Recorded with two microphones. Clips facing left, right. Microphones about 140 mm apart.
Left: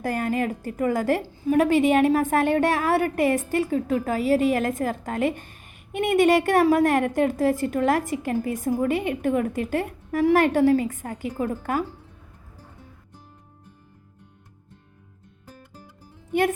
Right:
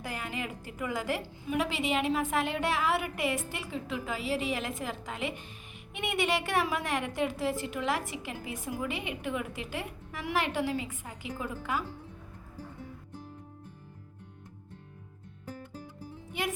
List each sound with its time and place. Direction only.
0.0 s a woman's voice: 50° left (ahead or behind)